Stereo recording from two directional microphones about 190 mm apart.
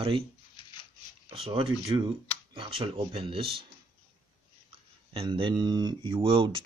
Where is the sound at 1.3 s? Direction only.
30° right (ahead or behind).